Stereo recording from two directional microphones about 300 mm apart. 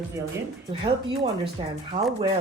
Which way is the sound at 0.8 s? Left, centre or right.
Centre.